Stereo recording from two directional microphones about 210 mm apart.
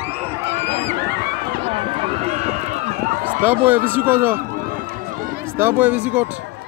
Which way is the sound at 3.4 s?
10° right (ahead or behind).